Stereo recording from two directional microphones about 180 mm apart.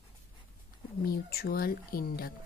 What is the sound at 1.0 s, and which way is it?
A woman's voice, 60° left (ahead or behind).